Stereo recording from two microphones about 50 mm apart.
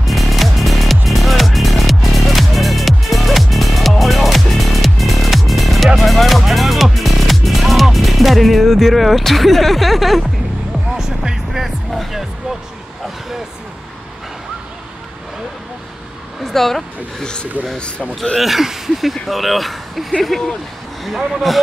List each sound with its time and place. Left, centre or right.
0.0 s music: centre
16.4 s speech: centre
17.2 s a man's voice: centre
18.4 s speech: centre